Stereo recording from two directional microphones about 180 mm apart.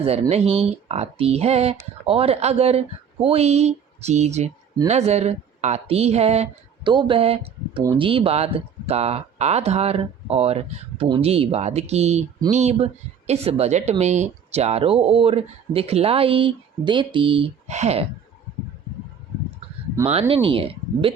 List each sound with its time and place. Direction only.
0.0 s speech: 35° right (ahead or behind)
20.1 s speech: 35° right (ahead or behind)